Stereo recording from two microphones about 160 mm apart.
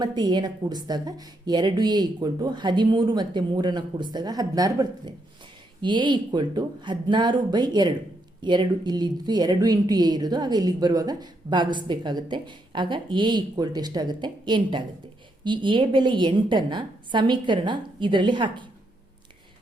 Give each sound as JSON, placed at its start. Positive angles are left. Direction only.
{"t": 0.0, "sound": "speech", "side_deg": -25}